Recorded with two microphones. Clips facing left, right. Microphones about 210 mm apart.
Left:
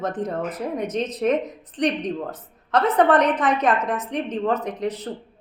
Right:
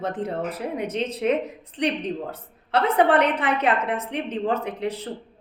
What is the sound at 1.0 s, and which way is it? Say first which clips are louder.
A woman's voice: even; 10° right (ahead or behind).